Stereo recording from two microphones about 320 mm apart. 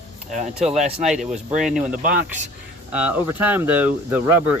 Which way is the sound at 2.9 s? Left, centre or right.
Centre.